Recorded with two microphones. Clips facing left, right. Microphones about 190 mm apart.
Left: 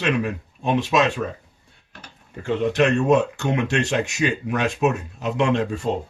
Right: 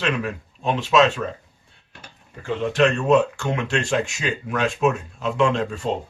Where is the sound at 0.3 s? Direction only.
15° left (ahead or behind).